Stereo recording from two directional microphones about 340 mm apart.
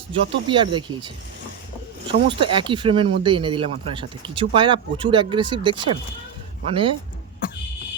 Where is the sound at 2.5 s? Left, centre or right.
Centre.